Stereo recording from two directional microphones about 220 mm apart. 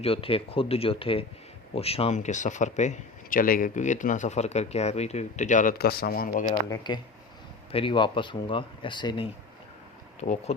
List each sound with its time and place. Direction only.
0.0 s speech: 25° left (ahead or behind)
6.7 s speech: 20° left (ahead or behind)